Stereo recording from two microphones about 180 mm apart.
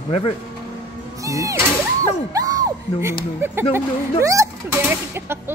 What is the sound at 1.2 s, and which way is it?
Speech, 20° right (ahead or behind).